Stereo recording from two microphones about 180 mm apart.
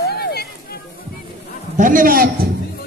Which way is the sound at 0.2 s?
60° left (ahead or behind).